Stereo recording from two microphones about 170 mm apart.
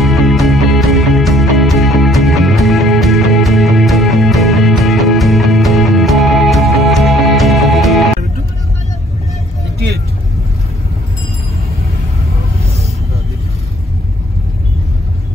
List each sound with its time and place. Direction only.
0.0 s music: centre (ahead or behind)
9.8 s vehicle: 70° right (ahead or behind)